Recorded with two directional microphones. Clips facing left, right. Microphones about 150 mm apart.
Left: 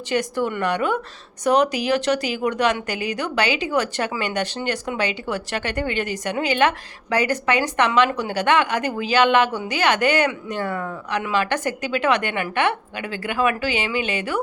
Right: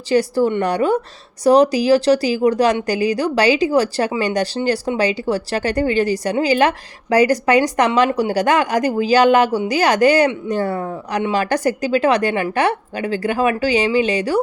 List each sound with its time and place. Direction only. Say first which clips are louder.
0.1 s speech: right 7 dB; 35° right (ahead or behind)